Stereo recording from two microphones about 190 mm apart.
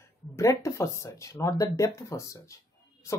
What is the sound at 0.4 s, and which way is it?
Speech, 15° left (ahead or behind).